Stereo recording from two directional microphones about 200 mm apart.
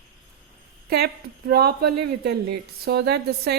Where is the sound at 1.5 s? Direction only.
50° right (ahead or behind).